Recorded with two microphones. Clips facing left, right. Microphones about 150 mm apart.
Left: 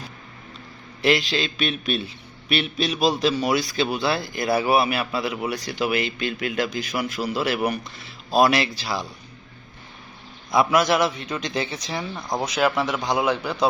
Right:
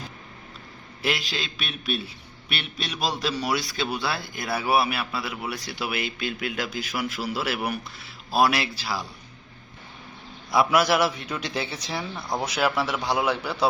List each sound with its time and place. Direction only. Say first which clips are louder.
1.0 s a man's voice: left 8 dB; centre (ahead or behind)
10.5 s a man's voice: left 2 dB; 5° right (ahead or behind)
12.1 s speech: left 3 dB; 15° left (ahead or behind)